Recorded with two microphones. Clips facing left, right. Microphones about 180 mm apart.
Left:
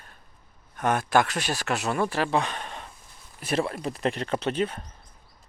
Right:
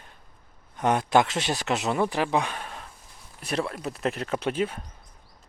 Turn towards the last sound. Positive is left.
turn(degrees=-10)  # may be behind; listen again after turning